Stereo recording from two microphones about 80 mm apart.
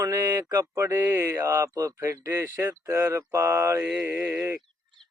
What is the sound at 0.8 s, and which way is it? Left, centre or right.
Mantra, right.